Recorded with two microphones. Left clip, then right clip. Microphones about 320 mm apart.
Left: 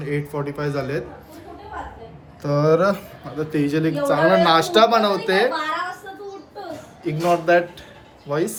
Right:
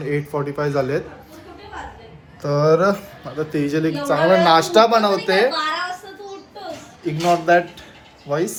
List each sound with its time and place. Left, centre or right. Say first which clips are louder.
0.0 s a man's voice: right 3 dB; centre
2.4 s a man's voice: right 2 dB; centre
7.0 s a man's voice: right 1 dB; centre